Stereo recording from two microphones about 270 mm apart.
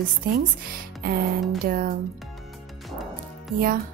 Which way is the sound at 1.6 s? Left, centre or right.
Right.